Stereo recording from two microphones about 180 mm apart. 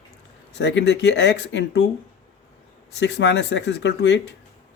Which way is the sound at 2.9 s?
75° left (ahead or behind).